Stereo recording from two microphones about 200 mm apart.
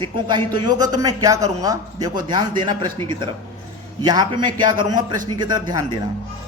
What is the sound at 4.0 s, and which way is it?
A man's voice, 20° right (ahead or behind).